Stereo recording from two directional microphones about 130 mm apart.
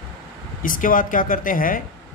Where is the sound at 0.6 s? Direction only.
90° left.